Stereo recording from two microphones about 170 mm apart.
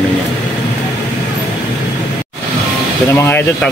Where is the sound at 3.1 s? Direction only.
15° left (ahead or behind).